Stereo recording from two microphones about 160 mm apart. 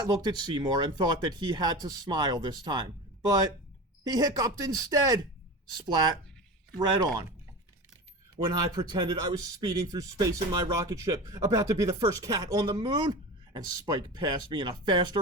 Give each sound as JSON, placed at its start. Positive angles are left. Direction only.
{"t": 0.0, "sound": "speech", "side_deg": -25}
{"t": 8.4, "sound": "speech", "side_deg": -25}